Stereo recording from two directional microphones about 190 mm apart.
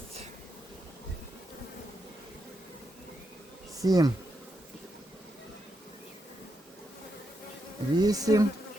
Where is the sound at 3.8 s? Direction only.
20° right (ahead or behind).